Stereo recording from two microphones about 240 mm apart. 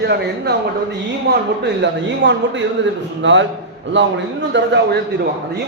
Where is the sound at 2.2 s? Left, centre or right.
Right.